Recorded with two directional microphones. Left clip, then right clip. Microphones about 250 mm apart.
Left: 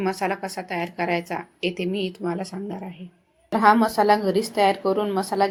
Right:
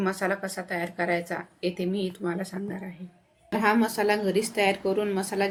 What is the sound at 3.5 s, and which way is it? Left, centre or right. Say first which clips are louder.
Speech: left 7 dB; centre.